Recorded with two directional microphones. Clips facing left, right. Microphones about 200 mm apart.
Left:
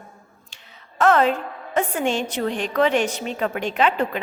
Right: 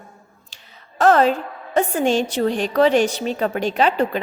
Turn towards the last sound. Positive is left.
turn(degrees=-35)  # may be behind; listen again after turning